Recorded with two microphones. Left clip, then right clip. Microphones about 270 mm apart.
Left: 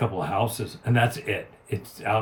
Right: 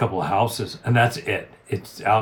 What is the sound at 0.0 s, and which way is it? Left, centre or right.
Speech, centre.